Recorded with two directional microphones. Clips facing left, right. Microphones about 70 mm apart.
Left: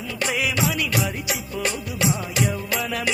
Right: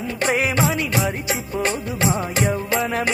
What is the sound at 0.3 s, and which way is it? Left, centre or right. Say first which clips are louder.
Music: right 4 dB; right.